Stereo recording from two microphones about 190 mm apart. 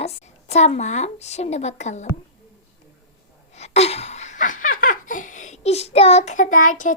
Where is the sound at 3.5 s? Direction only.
35° left (ahead or behind).